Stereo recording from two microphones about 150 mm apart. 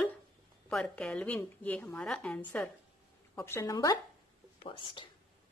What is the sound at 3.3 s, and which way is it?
Speech, 20° left (ahead or behind).